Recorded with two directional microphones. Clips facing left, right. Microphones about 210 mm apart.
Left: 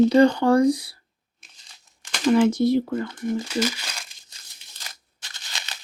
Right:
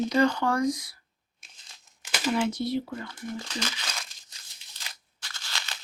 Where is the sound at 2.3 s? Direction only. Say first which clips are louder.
Left 9 dB; 45° left (ahead or behind).